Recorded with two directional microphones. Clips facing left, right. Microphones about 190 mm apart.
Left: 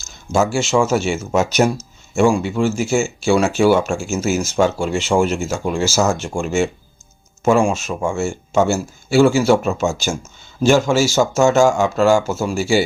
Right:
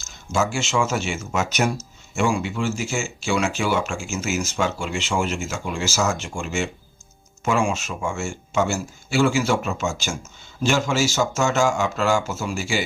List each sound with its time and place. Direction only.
0.3 s speech: 35° left (ahead or behind)
6.4 s speech: 50° left (ahead or behind)
7.6 s speech: 35° left (ahead or behind)